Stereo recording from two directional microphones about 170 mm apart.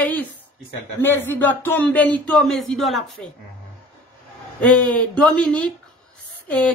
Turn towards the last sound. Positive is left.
turn(degrees=10)  # may be behind; listen again after turning